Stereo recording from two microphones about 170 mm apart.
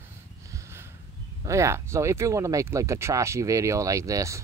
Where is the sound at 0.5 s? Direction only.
15° right (ahead or behind).